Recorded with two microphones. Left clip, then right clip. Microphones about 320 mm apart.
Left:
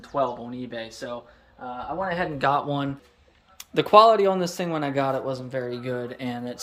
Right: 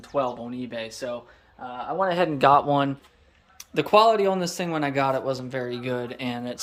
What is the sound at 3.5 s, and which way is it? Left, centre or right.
Speech, centre.